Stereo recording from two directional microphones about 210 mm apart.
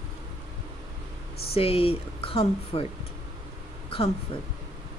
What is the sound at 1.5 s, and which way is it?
Speech, 25° left (ahead or behind).